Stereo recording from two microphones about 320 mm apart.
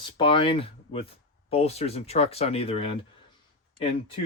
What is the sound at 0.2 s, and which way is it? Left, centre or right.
Speech, centre.